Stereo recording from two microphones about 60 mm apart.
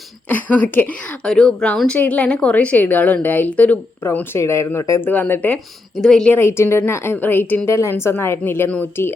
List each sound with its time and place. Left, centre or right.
0.3 s a woman's voice: left
1.2 s speech: centre
2.0 s a woman's voice: left
4.4 s a woman's voice: left
4.9 s a woman's voice: left
6.0 s speech: centre
6.3 s a woman's voice: left
7.7 s a woman's voice: left